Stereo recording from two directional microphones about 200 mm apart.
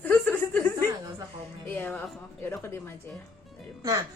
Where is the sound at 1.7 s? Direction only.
10° left (ahead or behind).